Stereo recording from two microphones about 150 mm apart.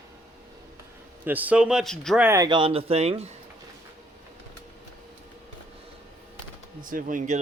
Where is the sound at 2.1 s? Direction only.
15° right (ahead or behind).